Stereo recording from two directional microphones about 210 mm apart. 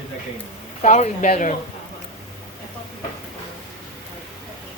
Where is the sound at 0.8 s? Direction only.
35° left (ahead or behind).